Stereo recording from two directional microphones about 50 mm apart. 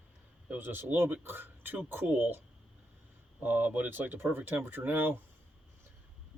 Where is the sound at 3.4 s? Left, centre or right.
Right.